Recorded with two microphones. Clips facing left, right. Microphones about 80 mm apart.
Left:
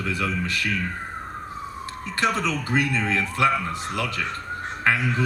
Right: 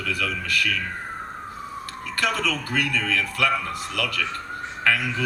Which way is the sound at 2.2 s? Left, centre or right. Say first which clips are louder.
Left 1 dB; left.